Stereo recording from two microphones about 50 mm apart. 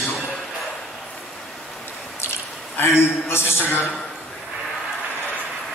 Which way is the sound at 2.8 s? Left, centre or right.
Left.